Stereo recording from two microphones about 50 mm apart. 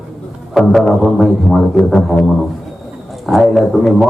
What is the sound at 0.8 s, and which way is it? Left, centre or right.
Music, centre.